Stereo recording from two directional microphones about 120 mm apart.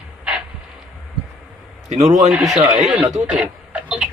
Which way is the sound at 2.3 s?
5° right (ahead or behind).